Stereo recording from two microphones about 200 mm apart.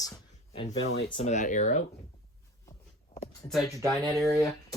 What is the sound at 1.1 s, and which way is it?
Speech, 35° left (ahead or behind).